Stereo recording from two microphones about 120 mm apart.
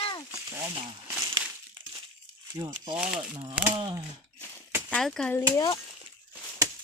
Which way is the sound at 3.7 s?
45° right (ahead or behind).